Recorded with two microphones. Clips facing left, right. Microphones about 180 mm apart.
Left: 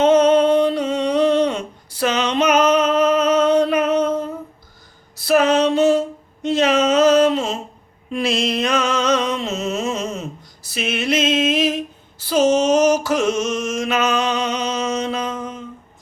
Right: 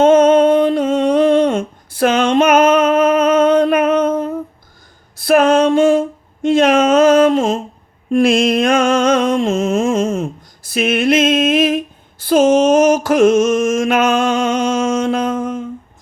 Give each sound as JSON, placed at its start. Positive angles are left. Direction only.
{"t": 0.0, "sound": "a sound", "side_deg": -50}
{"t": 8.1, "sound": "mantra", "side_deg": -50}
{"t": 12.2, "sound": "music", "side_deg": -55}